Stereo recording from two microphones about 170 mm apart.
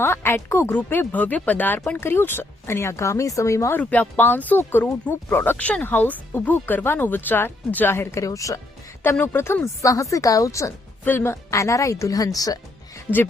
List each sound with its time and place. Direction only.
0.0 s speech: 15° left (ahead or behind)